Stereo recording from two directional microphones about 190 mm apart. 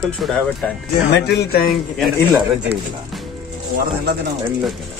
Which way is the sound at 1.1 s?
55° left (ahead or behind).